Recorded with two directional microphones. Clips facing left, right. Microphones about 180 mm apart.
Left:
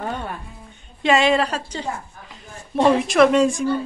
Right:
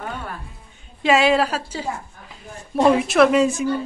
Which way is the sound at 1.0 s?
5° right (ahead or behind).